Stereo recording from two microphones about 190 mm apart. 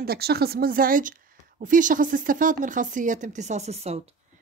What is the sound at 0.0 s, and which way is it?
A woman's voice, 55° right (ahead or behind).